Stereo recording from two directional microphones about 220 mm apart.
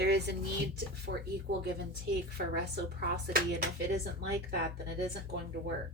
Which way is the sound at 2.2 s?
50° right (ahead or behind).